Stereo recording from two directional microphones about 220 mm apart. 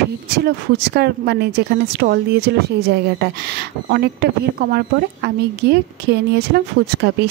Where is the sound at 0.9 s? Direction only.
50° right (ahead or behind).